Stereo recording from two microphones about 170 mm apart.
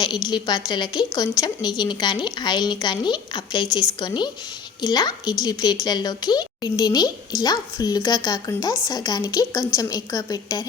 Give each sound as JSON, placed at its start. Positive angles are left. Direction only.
{"t": 0.3, "sound": "a woman's voice", "side_deg": 25}